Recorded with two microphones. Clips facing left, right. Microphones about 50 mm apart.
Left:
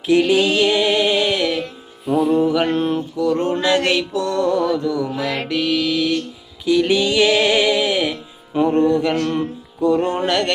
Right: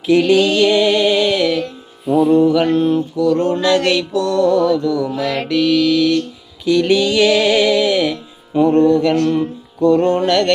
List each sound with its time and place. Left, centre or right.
0.1 s music: centre
2.0 s music: centre
2.6 s mantra: left
3.2 s mantra: left